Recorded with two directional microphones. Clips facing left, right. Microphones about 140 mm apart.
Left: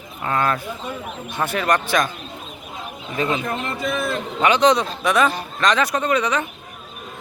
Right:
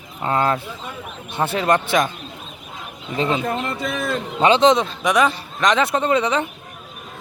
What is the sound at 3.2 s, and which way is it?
Speech, 30° right (ahead or behind).